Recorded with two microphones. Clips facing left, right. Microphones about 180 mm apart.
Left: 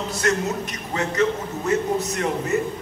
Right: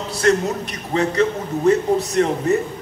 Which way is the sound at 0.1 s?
35° right (ahead or behind).